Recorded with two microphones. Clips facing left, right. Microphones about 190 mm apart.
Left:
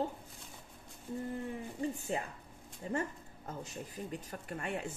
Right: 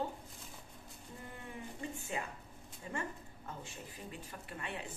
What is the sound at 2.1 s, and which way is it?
Speech, 40° left (ahead or behind).